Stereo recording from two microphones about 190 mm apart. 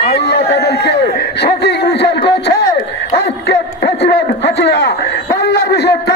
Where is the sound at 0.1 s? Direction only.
60° left (ahead or behind).